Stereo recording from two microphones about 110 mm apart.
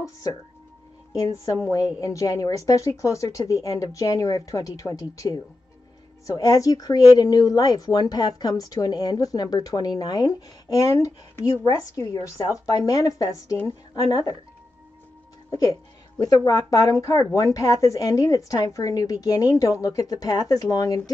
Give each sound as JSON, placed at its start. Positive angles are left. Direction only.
{"t": 0.0, "sound": "a woman's voice", "side_deg": 30}
{"t": 15.5, "sound": "a woman's voice", "side_deg": 35}